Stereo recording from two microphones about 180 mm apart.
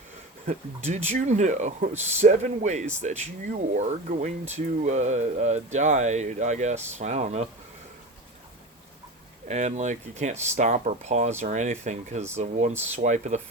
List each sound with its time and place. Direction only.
0.9 s speech: 40° right (ahead or behind)
9.5 s speech: 40° right (ahead or behind)